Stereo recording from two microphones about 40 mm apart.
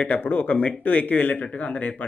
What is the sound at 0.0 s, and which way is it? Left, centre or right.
Speech, left.